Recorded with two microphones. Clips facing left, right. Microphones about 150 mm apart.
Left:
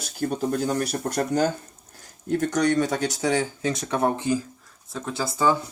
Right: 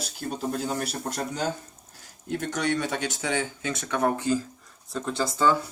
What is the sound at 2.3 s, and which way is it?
Speech, 45° left (ahead or behind).